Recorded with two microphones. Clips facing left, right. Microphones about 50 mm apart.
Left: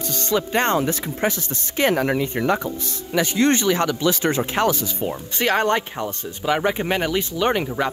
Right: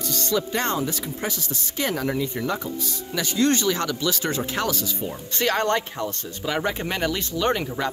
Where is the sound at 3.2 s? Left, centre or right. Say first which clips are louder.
Left 3 dB; left.